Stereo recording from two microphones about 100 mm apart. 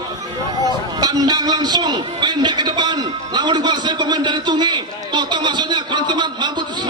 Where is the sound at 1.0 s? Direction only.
40° right (ahead or behind).